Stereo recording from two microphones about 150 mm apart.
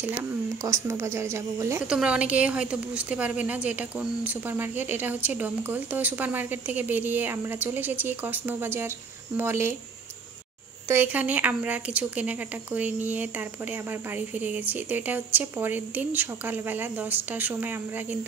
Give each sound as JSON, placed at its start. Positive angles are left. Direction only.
{"t": 0.7, "sound": "a woman's voice", "side_deg": -20}
{"t": 1.9, "sound": "speech", "side_deg": -5}
{"t": 10.9, "sound": "speech", "side_deg": -10}